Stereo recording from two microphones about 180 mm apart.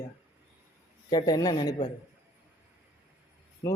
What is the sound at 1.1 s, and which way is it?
Speech, 20° left (ahead or behind).